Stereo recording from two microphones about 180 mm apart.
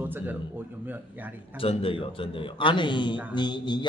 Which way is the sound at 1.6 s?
30° left (ahead or behind).